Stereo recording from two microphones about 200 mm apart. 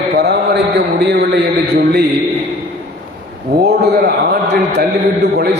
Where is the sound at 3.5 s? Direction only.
50° right (ahead or behind).